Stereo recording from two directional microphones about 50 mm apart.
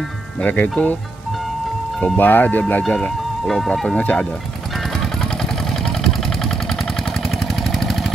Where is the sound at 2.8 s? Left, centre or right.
Centre.